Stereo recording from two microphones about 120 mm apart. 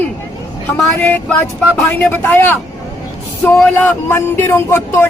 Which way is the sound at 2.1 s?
15° left (ahead or behind).